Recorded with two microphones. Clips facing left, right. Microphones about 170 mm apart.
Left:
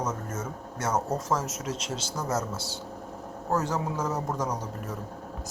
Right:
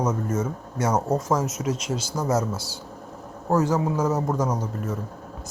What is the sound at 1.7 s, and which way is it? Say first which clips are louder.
Speech: right 5 dB; 25° left (ahead or behind).